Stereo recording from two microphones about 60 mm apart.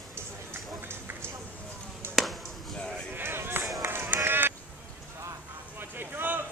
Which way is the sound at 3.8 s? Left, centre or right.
Right.